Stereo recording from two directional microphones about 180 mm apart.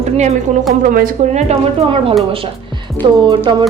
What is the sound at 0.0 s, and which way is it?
Speech, 40° right (ahead or behind).